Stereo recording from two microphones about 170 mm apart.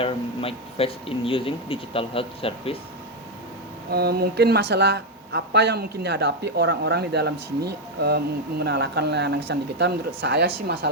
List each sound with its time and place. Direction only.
0.0 s speech: 35° left (ahead or behind)
3.9 s speech: 65° right (ahead or behind)